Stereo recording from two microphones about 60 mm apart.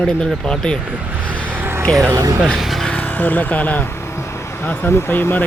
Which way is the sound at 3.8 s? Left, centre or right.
Left.